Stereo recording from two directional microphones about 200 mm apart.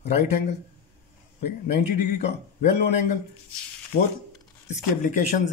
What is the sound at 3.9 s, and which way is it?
Speech, 50° left (ahead or behind).